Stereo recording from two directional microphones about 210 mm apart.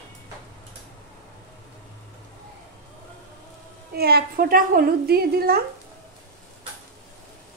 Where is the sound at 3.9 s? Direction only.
50° right (ahead or behind).